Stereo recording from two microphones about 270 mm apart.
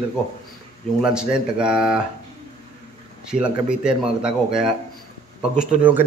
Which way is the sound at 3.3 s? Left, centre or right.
Centre.